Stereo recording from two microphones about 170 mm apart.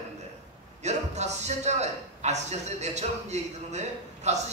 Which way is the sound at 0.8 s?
40° right (ahead or behind).